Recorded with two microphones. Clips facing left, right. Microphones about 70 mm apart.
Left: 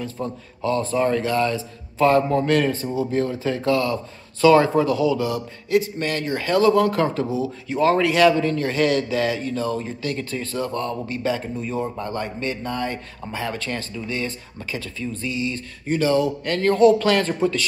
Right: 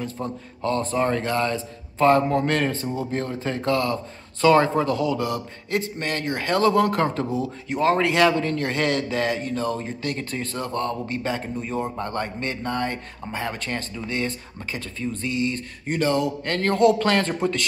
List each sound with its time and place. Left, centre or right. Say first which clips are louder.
0.2 s speech: left 3 dB; right
0.6 s a man's voice: left 2 dB; right
5.9 s a man's voice: left 2 dB; right
10.5 s a man's voice: left 1 dB; right
17.2 s speech: left 3 dB; right